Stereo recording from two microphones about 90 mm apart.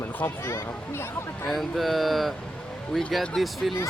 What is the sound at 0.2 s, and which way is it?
Speech, 25° left (ahead or behind).